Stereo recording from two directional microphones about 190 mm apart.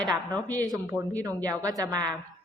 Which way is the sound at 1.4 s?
20° right (ahead or behind).